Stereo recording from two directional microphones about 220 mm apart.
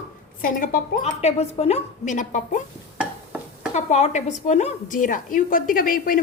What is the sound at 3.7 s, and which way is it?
A woman's voice, 30° left (ahead or behind).